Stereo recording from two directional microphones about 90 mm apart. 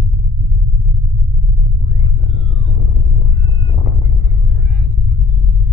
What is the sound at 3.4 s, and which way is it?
Cat, 40° left (ahead or behind).